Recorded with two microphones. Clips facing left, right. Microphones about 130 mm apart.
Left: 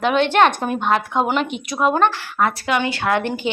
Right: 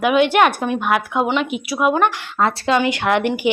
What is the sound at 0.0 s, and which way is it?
A woman's voice, 10° right (ahead or behind).